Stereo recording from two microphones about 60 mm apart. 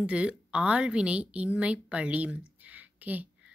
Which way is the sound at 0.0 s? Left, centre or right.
Centre.